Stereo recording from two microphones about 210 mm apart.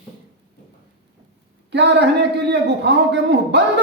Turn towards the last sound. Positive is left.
turn(degrees=-55)  # may be behind; listen again after turning